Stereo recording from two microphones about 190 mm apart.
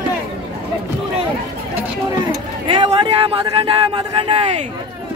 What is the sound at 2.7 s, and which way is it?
Speech, 25° right (ahead or behind).